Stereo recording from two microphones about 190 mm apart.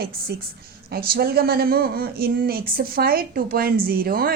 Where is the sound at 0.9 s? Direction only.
55° right (ahead or behind).